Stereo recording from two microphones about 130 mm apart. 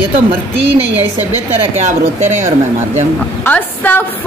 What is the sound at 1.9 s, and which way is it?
Speech, 65° right (ahead or behind).